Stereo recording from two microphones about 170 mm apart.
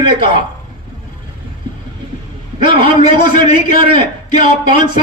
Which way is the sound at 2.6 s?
30° right (ahead or behind).